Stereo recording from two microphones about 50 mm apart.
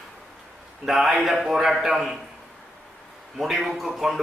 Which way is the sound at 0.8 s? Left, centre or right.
Centre.